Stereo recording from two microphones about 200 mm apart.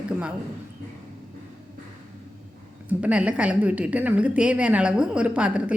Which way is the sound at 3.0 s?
5° right (ahead or behind).